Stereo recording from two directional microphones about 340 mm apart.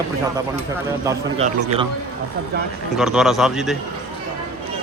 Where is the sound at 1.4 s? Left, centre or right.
Centre.